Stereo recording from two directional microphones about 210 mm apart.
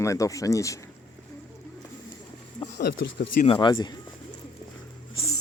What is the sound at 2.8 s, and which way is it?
Speech, 55° left (ahead or behind).